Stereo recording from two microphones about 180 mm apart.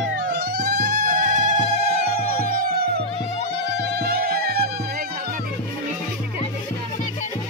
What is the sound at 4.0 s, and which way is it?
Music, 60° right (ahead or behind).